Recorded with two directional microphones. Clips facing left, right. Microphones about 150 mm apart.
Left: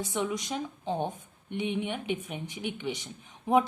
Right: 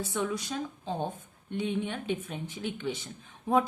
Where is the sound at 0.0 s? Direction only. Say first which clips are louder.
Even; 20° left (ahead or behind).